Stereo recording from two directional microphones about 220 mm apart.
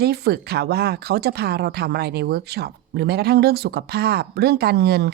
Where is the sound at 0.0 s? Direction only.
45° right (ahead or behind).